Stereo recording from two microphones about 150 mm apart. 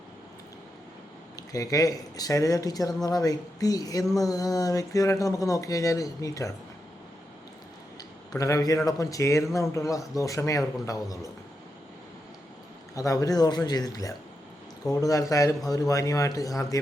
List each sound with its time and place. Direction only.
1.4 s speech: 25° left (ahead or behind)
8.4 s speech: 25° left (ahead or behind)
13.0 s speech: 25° left (ahead or behind)